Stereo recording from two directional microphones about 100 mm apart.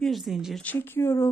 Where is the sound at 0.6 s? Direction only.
20° left (ahead or behind).